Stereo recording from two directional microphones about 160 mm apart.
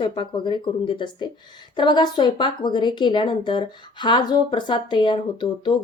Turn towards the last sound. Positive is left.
turn(degrees=30)  # may be behind; listen again after turning